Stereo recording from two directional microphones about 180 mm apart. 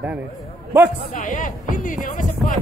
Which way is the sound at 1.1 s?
45° left (ahead or behind).